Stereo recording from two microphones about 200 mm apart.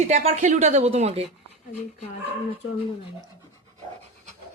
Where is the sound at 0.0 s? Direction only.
35° right (ahead or behind).